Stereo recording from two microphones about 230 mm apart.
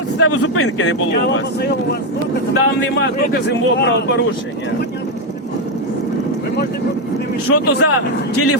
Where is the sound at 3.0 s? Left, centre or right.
Left.